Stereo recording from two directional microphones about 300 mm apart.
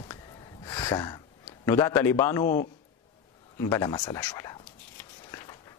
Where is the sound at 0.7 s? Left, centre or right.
Centre.